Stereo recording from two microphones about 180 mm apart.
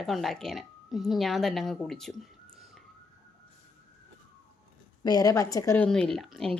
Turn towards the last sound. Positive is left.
turn(degrees=0)  # may be behind; listen again after turning